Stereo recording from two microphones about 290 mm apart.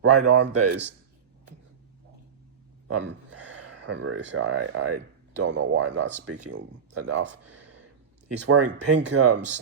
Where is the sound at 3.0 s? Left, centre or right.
Right.